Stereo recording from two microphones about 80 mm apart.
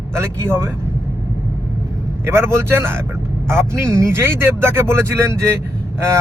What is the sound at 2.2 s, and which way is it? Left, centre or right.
Speech, right.